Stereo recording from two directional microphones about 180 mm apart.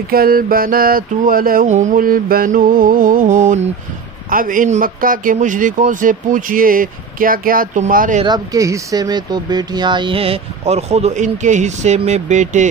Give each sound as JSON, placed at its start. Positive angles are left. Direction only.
{"t": 0.1, "sound": "speech", "side_deg": -55}
{"t": 8.2, "sound": "speech", "side_deg": -20}